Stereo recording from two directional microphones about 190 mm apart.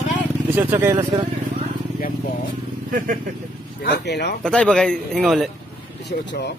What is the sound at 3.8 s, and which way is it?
Speech, 55° left (ahead or behind).